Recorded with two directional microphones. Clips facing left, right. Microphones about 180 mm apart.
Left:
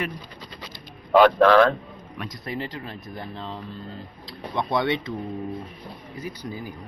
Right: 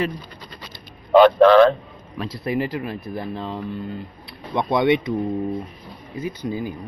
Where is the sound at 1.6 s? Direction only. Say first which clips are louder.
Right 4 dB; 30° right (ahead or behind).